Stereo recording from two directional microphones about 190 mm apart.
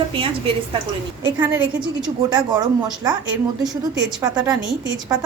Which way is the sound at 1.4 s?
10° right (ahead or behind).